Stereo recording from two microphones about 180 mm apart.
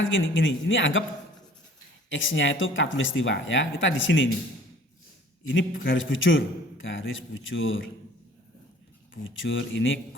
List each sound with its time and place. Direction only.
0.0 s a man's voice: 90° left
2.0 s a man's voice: 90° left
5.5 s a man's voice: 90° left
9.2 s a man's voice: 90° left